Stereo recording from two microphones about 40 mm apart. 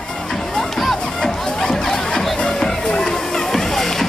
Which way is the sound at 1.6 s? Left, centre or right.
Centre.